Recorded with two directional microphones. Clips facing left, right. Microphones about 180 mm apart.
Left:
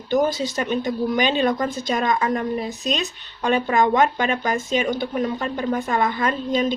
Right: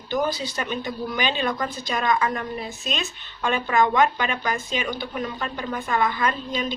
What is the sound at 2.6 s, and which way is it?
A woman's voice, 40° left (ahead or behind).